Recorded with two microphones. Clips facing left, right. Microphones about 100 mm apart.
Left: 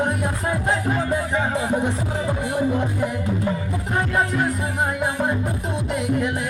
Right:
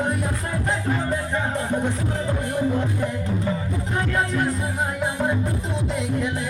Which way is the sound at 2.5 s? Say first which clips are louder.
Left 1 dB; 10° left (ahead or behind).